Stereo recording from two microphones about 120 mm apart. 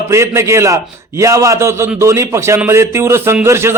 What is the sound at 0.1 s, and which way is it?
A man's voice, 25° right (ahead or behind).